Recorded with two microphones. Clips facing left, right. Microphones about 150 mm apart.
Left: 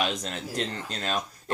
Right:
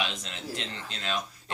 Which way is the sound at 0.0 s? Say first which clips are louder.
Left 5 dB; 45° left (ahead or behind).